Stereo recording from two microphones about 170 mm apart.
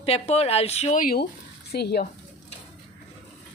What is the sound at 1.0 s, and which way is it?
Speech, 60° left (ahead or behind).